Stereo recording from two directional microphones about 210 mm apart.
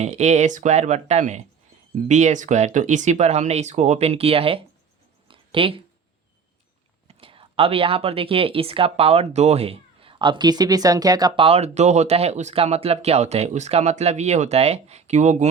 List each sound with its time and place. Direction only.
0.0 s speech: 30° right (ahead or behind)
5.3 s a sound: 25° right (ahead or behind)
7.1 s a woman's voice: 25° right (ahead or behind)